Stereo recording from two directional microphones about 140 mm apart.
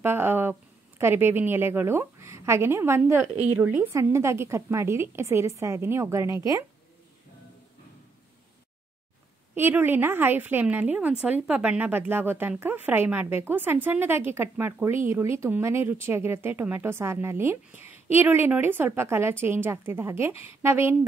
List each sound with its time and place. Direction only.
0.0 s a woman's voice: 15° right (ahead or behind)
9.6 s a woman's voice: 15° right (ahead or behind)